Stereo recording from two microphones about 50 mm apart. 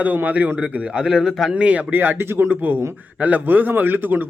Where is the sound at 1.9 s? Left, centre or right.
Right.